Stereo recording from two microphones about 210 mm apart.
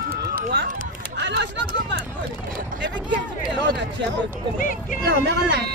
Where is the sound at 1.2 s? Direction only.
50° right (ahead or behind).